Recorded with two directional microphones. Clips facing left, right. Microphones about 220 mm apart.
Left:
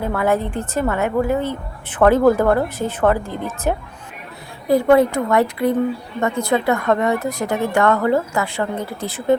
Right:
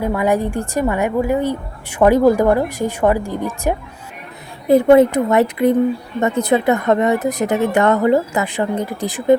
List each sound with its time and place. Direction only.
0.0 s a woman's voice: 15° right (ahead or behind)